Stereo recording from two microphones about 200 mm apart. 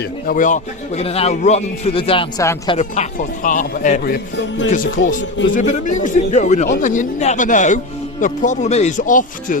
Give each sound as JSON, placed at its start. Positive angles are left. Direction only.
{"t": 0.3, "sound": "a man's voice", "side_deg": 40}
{"t": 2.4, "sound": "speech", "side_deg": 15}
{"t": 2.7, "sound": "a man's voice", "side_deg": 35}
{"t": 4.4, "sound": "music", "side_deg": 65}
{"t": 4.7, "sound": "a man's voice", "side_deg": 40}